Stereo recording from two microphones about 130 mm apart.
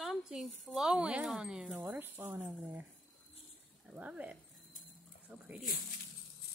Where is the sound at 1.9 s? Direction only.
15° right (ahead or behind).